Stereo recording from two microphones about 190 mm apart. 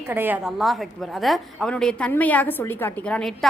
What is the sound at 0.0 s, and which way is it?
A woman's voice, 10° right (ahead or behind).